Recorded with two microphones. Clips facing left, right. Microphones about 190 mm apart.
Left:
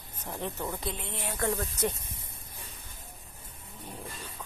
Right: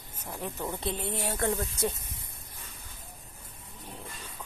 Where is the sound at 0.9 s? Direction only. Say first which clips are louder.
Right 5 dB; 40° right (ahead or behind).